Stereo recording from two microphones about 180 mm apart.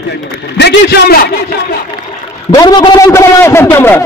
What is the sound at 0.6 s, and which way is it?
Speech, 65° left (ahead or behind).